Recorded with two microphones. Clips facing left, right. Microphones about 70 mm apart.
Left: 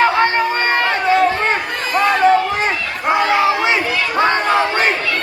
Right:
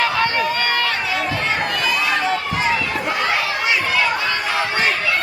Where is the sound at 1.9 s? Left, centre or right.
Left.